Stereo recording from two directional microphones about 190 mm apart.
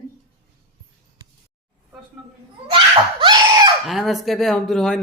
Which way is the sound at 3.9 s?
Centre (ahead or behind).